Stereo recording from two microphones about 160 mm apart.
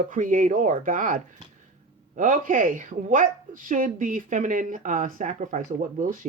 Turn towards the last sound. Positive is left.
turn(degrees=-50)  # may be behind; listen again after turning